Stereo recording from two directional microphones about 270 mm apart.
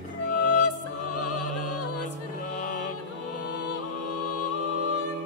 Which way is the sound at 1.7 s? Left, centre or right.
Left.